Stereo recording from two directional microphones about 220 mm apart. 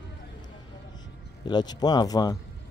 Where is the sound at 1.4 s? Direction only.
20° left (ahead or behind).